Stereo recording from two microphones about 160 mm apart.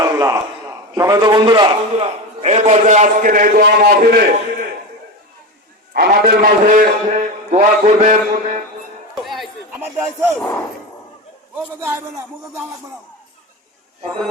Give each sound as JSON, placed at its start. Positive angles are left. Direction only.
{"t": 0.0, "sound": "crowd", "side_deg": -20}
{"t": 0.9, "sound": "a man's voice", "side_deg": -20}
{"t": 2.4, "sound": "a man's voice", "side_deg": -45}
{"t": 5.9, "sound": "a man's voice", "side_deg": -75}
{"t": 9.2, "sound": "a sound", "side_deg": 0}
{"t": 9.8, "sound": "speech", "side_deg": -15}
{"t": 11.8, "sound": "speech", "side_deg": -15}